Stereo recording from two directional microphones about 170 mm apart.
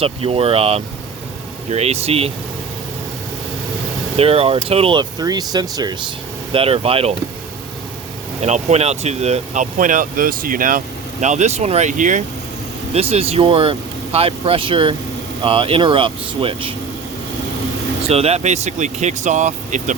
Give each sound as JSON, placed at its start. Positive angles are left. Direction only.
{"t": 0.0, "sound": "speech", "side_deg": -35}
{"t": 4.2, "sound": "speech", "side_deg": -35}
{"t": 8.4, "sound": "speech", "side_deg": -40}
{"t": 12.9, "sound": "speech", "side_deg": -35}
{"t": 18.1, "sound": "speech", "side_deg": -40}